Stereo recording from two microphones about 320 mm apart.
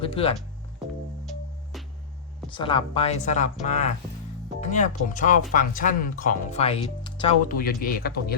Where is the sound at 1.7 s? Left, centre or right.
Centre.